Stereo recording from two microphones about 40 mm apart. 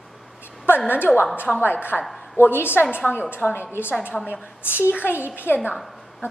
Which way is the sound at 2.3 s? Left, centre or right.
Left.